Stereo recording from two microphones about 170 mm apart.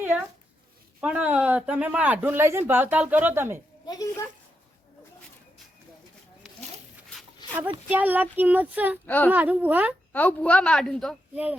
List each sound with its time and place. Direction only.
0.0 s speech: 10° right (ahead or behind)
7.4 s a sound: 25° left (ahead or behind)
7.9 s speech: 10° right (ahead or behind)
9.0 s a woman's voice: 10° left (ahead or behind)
9.3 s speech: 10° right (ahead or behind)
10.1 s a woman's voice: 10° left (ahead or behind)